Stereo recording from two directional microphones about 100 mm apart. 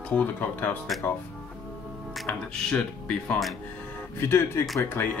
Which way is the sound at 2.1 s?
10° left (ahead or behind).